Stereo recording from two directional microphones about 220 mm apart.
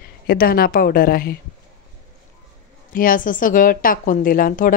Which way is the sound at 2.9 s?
40° left (ahead or behind).